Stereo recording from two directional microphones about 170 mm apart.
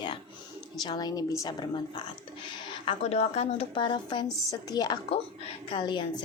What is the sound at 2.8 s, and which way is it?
A woman's voice, 40° left (ahead or behind).